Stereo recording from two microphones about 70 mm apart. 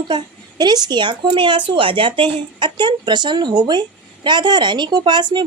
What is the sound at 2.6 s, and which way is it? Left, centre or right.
A woman's voice, right.